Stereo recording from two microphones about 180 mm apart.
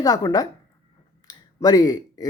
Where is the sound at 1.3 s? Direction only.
20° left (ahead or behind).